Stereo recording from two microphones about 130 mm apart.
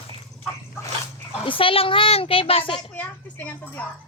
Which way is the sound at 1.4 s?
40° left (ahead or behind).